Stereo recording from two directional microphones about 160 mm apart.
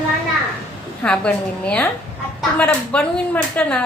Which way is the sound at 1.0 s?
5° left (ahead or behind).